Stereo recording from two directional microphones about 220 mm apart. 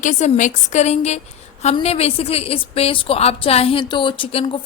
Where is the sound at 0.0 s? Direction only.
35° left (ahead or behind).